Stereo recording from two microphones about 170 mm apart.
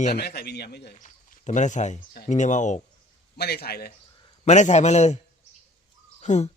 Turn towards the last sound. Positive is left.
turn(degrees=45)  # may be behind; listen again after turning